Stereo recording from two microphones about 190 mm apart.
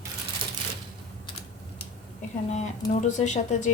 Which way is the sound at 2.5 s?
40° left (ahead or behind).